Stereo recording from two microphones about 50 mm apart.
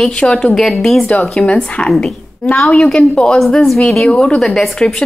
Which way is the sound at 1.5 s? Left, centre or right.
Left.